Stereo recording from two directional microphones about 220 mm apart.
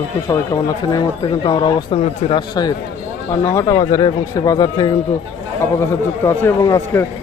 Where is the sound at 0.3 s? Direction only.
15° left (ahead or behind).